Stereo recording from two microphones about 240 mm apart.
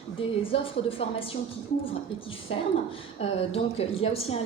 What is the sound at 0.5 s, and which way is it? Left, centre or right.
Speech, left.